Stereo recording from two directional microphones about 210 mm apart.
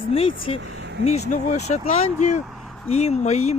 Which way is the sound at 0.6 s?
60° right (ahead or behind).